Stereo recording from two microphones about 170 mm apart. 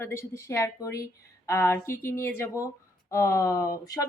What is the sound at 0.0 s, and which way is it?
Speech, 15° left (ahead or behind).